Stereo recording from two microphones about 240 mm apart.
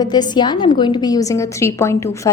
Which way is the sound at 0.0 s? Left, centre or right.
Centre.